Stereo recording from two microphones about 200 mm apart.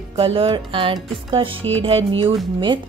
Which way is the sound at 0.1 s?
30° right (ahead or behind).